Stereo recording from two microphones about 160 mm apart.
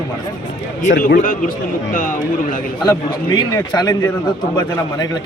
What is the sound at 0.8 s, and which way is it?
A man's voice, 50° left (ahead or behind).